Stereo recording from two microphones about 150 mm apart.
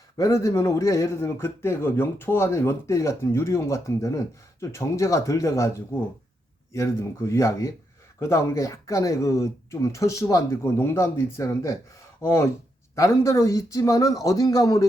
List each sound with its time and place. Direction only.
0.2 s speech: 20° left (ahead or behind)